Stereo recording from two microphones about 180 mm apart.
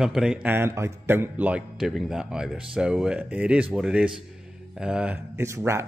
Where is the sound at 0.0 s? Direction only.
5° right (ahead or behind).